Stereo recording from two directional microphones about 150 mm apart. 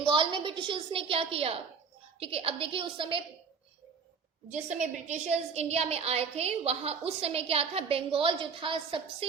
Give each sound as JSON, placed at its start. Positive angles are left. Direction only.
{"t": 0.0, "sound": "a woman's voice", "side_deg": -35}
{"t": 4.5, "sound": "a woman's voice", "side_deg": -50}